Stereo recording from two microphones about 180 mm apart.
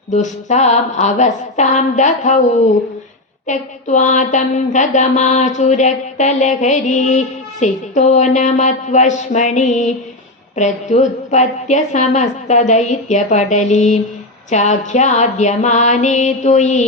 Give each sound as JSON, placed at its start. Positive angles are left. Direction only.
{"t": 0.1, "sound": "mantra", "side_deg": 40}
{"t": 3.4, "sound": "mantra", "side_deg": 40}